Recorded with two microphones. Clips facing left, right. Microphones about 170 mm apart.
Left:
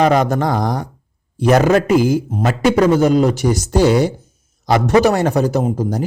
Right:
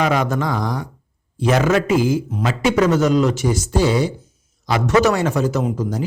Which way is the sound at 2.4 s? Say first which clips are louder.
Left 3 dB; 55° left (ahead or behind).